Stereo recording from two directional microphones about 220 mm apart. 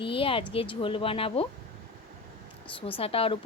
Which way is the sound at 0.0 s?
25° left (ahead or behind).